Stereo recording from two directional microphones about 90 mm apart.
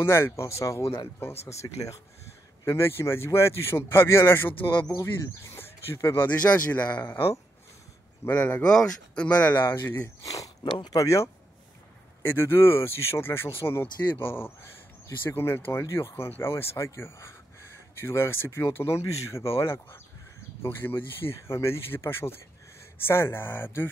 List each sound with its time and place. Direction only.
0.0 s speech: 30° left (ahead or behind)
0.8 s speech: 90° left
1.2 s speech: 35° left (ahead or behind)
6.2 s speech: 15° left (ahead or behind)
8.3 s speech: 20° left (ahead or behind)
10.2 s speech: 40° left (ahead or behind)
10.7 s speech: 60° left (ahead or behind)
11.0 s speech: 35° left (ahead or behind)
12.3 s speech: 25° left (ahead or behind)